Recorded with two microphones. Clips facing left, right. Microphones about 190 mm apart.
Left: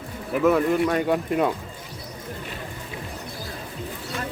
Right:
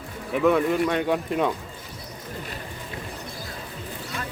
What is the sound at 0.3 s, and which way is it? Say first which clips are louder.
Speech: left 1 dB; centre (ahead or behind).